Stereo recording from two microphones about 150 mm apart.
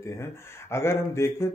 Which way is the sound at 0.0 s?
15° left (ahead or behind).